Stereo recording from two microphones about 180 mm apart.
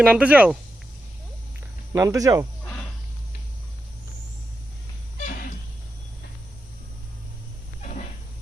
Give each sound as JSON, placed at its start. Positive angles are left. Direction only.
{"t": 0.0, "sound": "speech", "side_deg": -5}
{"t": 1.9, "sound": "speech", "side_deg": -15}
{"t": 7.8, "sound": "a sound", "side_deg": 40}